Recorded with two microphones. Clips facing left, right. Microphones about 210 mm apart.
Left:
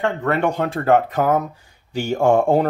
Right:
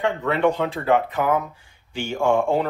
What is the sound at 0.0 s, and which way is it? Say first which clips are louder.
Speech: even; 45° left (ahead or behind).